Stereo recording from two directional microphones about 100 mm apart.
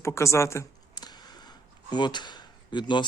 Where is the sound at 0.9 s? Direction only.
45° left (ahead or behind).